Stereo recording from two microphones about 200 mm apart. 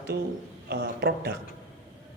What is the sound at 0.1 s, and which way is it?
A man's voice, 55° right (ahead or behind).